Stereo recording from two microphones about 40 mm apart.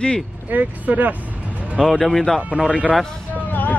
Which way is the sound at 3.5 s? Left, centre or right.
Left.